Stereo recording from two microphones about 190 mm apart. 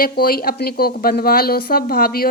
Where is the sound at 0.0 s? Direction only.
50° left (ahead or behind).